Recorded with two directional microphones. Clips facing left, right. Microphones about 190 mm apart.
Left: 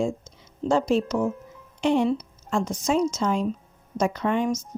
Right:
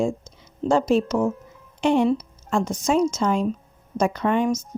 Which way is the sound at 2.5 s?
50° right (ahead or behind).